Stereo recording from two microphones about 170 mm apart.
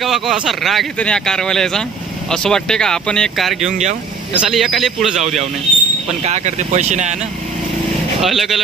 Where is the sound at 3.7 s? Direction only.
40° right (ahead or behind).